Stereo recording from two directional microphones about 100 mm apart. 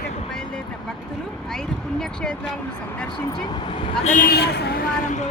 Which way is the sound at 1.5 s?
5° left (ahead or behind).